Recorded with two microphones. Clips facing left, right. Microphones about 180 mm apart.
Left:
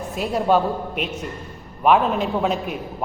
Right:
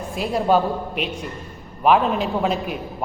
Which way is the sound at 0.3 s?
5° right (ahead or behind).